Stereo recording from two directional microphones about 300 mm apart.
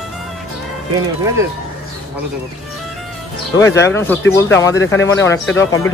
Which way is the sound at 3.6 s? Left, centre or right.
Centre.